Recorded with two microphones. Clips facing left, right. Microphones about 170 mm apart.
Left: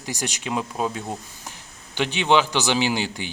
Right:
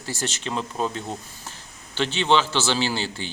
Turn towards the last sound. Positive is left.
turn(degrees=15)  # may be behind; listen again after turning